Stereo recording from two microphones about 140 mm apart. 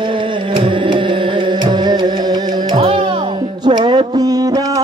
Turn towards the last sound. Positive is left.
turn(degrees=-25)  # may be behind; listen again after turning